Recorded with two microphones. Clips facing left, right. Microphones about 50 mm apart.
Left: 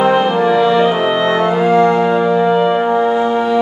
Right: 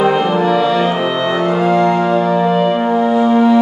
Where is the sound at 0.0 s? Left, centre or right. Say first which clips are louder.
Left 1 dB; centre.